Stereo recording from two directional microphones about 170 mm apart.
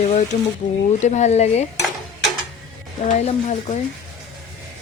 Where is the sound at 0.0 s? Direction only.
40° left (ahead or behind).